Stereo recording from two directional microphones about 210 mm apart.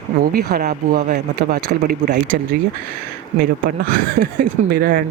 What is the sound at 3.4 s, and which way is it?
Speech, 45° right (ahead or behind).